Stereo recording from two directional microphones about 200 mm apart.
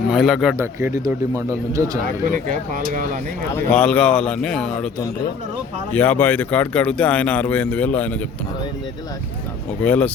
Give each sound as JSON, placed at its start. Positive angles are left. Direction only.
{"t": 0.1, "sound": "speech", "side_deg": 0}
{"t": 0.5, "sound": "speech", "side_deg": -10}
{"t": 2.5, "sound": "speech", "side_deg": -45}
{"t": 3.5, "sound": "speech", "side_deg": 5}
{"t": 5.9, "sound": "speech", "side_deg": 10}
{"t": 9.8, "sound": "speech", "side_deg": 5}